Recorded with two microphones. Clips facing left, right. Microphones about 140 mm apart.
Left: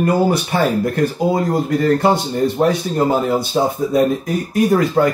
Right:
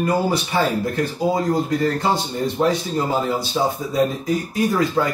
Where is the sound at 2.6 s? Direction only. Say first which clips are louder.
Even; 55° left (ahead or behind).